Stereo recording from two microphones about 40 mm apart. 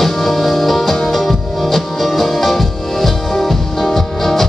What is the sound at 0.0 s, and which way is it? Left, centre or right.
Music, centre.